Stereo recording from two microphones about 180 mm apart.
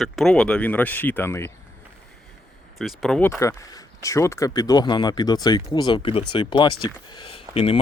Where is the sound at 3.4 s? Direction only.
15° left (ahead or behind).